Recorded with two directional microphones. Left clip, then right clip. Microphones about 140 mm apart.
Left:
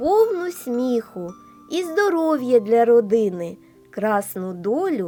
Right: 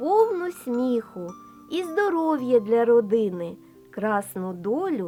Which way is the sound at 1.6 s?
15° left (ahead or behind).